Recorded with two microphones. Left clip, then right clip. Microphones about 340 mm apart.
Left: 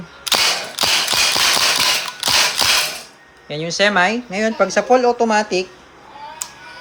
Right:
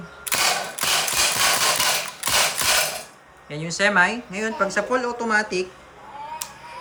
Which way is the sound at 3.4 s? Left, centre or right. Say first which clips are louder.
Left 5 dB; centre.